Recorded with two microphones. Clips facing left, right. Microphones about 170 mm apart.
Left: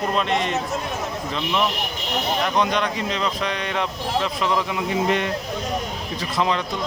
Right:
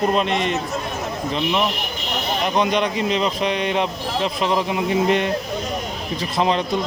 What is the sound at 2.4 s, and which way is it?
A man's voice, 20° right (ahead or behind).